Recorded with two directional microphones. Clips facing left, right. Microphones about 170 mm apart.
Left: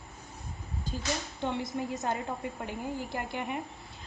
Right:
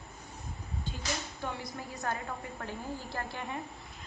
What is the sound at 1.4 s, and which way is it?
A woman's voice, 25° left (ahead or behind).